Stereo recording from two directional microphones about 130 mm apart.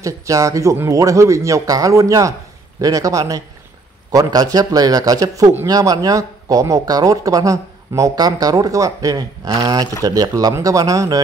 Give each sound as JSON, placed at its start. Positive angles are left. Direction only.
{"t": 0.0, "sound": "speech", "side_deg": -25}